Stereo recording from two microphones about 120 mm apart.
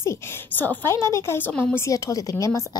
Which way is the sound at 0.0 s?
20° left (ahead or behind).